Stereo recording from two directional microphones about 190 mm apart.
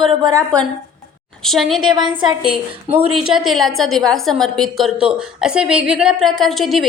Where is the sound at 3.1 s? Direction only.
Centre (ahead or behind).